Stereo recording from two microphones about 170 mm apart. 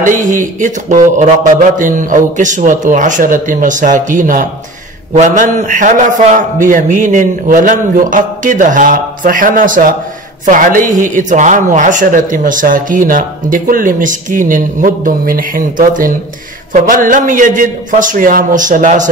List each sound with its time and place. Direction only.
0.0 s speech: 50° right (ahead or behind)